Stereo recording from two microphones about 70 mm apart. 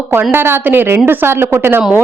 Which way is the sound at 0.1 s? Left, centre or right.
Right.